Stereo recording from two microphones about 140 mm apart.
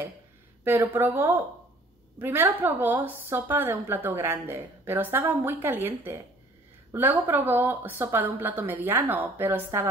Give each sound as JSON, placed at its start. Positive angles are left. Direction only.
{"t": 0.7, "sound": "a woman's voice", "side_deg": -15}